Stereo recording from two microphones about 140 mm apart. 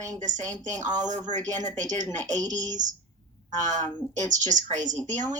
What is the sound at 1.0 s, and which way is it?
A woman's voice, 60° right (ahead or behind).